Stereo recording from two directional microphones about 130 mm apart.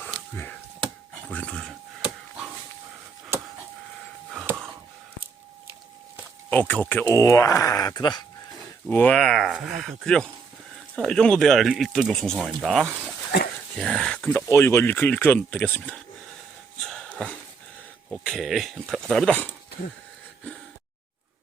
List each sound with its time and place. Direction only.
1.3 s speech: 10° left (ahead or behind)
6.5 s speech: 10° left (ahead or behind)
7.1 s speech: 25° left (ahead or behind)
8.9 s speech: 15° left (ahead or behind)
14.4 s speech: 20° left (ahead or behind)
16.8 s a sound: 5° left (ahead or behind)
18.1 s speech: centre (ahead or behind)